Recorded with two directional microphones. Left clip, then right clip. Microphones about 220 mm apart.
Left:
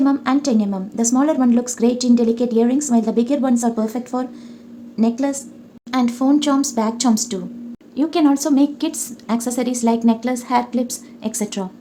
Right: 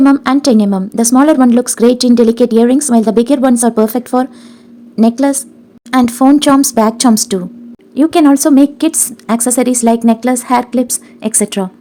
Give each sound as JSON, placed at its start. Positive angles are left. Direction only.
{"t": 0.0, "sound": "a woman's voice", "side_deg": -40}